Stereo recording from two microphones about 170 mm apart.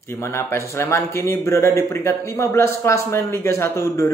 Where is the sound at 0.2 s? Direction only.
15° left (ahead or behind).